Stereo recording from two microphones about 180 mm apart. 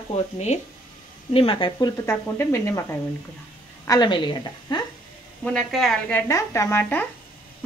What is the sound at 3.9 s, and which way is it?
Speech, 25° left (ahead or behind).